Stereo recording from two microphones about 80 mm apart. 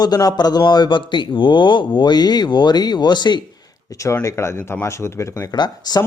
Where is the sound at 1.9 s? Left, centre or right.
Left.